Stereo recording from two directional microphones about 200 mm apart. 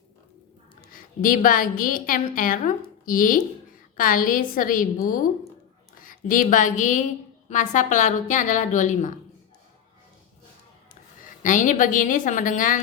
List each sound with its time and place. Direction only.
0.9 s a woman's voice: 45° left (ahead or behind)
11.2 s a woman's voice: 40° left (ahead or behind)